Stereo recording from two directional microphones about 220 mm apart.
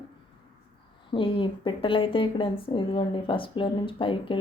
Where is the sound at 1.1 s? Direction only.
25° left (ahead or behind).